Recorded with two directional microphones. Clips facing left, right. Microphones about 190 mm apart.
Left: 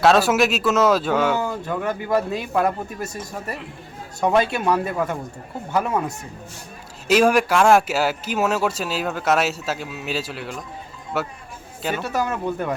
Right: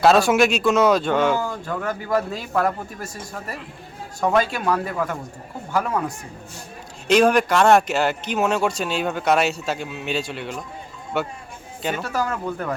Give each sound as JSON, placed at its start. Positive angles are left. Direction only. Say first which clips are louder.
{"t": 0.0, "sound": "speech", "louder": "right 1 dB", "side_deg": 0}
{"t": 1.6, "sound": "speech", "louder": "left 2 dB", "side_deg": 20}
{"t": 4.3, "sound": "speech", "louder": "left 1 dB", "side_deg": 20}
{"t": 7.1, "sound": "speech", "louder": "even", "side_deg": 5}
{"t": 12.0, "sound": "speech", "louder": "left 4 dB", "side_deg": 20}